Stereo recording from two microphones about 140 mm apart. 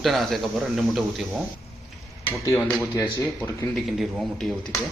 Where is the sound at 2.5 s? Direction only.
5° left (ahead or behind).